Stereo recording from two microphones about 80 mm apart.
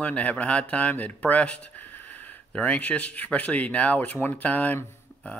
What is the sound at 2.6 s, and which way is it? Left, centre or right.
Speech, centre.